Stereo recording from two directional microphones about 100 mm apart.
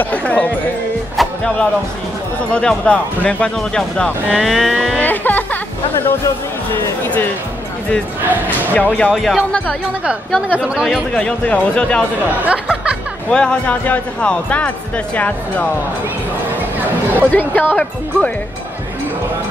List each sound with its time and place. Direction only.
0.0 s speech: 15° left (ahead or behind)
1.1 s speech: 5° left (ahead or behind)
5.0 s music: 20° left (ahead or behind)
6.0 s speech: 25° left (ahead or behind)
8.5 s speech: 15° left (ahead or behind)
9.1 s speech: centre (ahead or behind)
10.5 s speech: 5° right (ahead or behind)
11.1 s speech: 10° left (ahead or behind)
12.4 s speech: 10° right (ahead or behind)
13.3 s speech: 10° left (ahead or behind)
17.3 s speech: 20° left (ahead or behind)